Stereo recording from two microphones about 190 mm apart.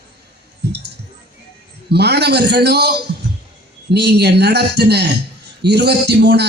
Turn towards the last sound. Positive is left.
turn(degrees=-60)  # may be behind; listen again after turning